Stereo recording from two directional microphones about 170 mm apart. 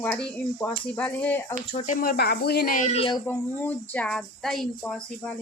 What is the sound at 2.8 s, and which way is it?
Speech, 40° left (ahead or behind).